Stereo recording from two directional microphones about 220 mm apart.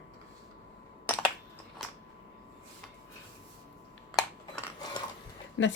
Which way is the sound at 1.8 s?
Centre (ahead or behind).